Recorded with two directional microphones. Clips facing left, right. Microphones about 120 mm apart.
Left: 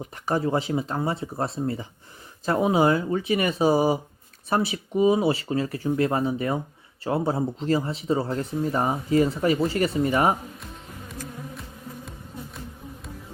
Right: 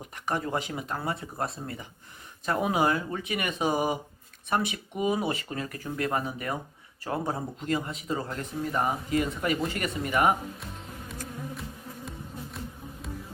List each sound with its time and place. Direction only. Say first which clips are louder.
0.3 s speech: left 6 dB; 30° left (ahead or behind)